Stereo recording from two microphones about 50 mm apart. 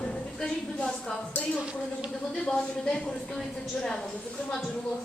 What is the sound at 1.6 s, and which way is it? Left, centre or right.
Speech, centre.